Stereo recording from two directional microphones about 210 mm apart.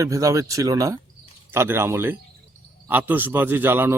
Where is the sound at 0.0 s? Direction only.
15° right (ahead or behind).